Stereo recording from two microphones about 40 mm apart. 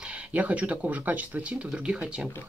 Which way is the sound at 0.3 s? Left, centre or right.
Right.